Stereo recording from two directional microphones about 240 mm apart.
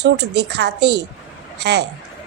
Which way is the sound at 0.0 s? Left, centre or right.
Right.